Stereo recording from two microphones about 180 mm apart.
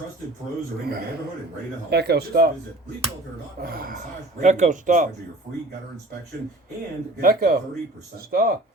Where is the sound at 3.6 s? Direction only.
60° right (ahead or behind).